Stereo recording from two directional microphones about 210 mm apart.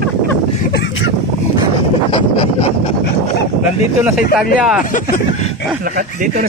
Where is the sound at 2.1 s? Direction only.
25° left (ahead or behind).